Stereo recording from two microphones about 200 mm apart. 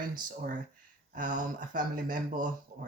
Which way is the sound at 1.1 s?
40° right (ahead or behind).